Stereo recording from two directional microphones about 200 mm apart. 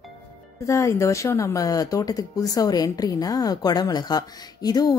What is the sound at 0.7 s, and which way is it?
A woman's voice, 15° left (ahead or behind).